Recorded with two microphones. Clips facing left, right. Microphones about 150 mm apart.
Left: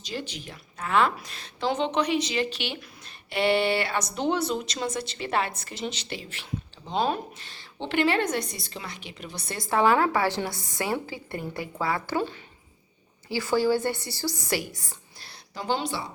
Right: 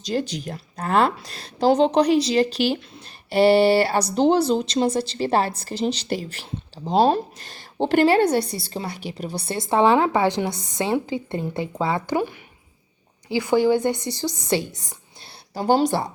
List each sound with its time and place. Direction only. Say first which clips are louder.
0.0 s a woman's voice: right 10 dB; 40° right (ahead or behind); by 15.3 s 20° right (ahead or behind)
15.5 s speech: right 10 dB; 40° right (ahead or behind)